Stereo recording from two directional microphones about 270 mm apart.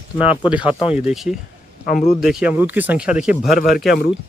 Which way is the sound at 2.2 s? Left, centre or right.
Centre.